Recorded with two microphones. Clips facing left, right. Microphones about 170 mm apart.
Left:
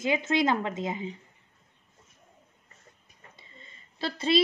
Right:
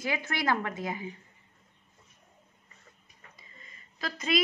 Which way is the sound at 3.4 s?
30° left (ahead or behind).